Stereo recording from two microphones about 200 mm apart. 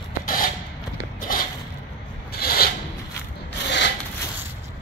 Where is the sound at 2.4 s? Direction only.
50° left (ahead or behind).